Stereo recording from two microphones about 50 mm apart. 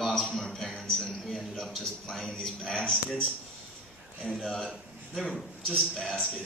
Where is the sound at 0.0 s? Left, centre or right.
Centre.